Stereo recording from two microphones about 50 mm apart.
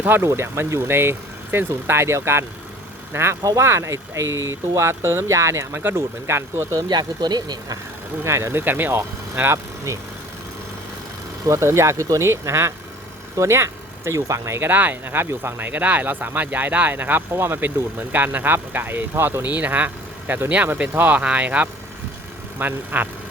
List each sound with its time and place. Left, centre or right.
0.0 s speech: right
0.3 s speech: right
5.7 s speech: right
8.2 s speech: right
8.5 s speech: right
11.5 s speech: right
13.3 s speech: right
14.6 s speech: right
17.3 s speech: right
18.1 s speech: right
19.1 s speech: right
19.4 s speech: right